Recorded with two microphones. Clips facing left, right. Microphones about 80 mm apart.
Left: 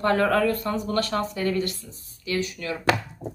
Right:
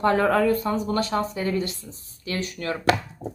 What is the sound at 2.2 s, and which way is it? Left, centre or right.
Speech, right.